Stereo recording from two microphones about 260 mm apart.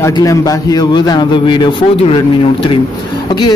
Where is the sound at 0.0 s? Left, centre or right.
Centre.